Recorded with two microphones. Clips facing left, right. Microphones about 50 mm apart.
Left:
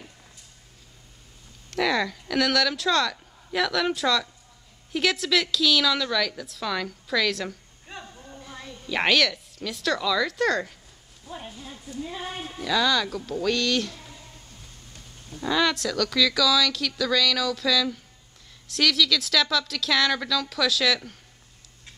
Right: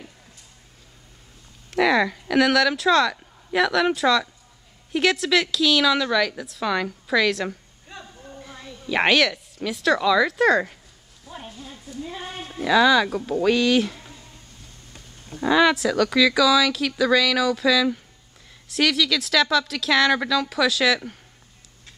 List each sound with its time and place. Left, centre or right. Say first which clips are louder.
1.7 s speech: right 5 dB; centre
8.3 s a sound: right 2 dB; centre
8.5 s a woman's voice: right 4 dB; centre
11.2 s a sound: even; centre
11.8 s speech: even; centre
12.5 s speech: right 7 dB; centre
15.3 s speech: right 6 dB; centre